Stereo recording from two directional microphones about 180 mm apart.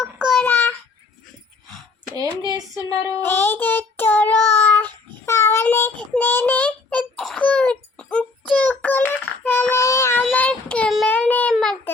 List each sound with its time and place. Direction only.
0.0 s child singing: centre (ahead or behind)
0.4 s a sound: 10° left (ahead or behind)
2.1 s speech: 20° right (ahead or behind)
3.2 s child singing: 10° left (ahead or behind)